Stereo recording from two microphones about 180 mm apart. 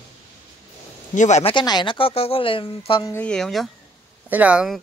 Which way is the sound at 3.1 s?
5° left (ahead or behind).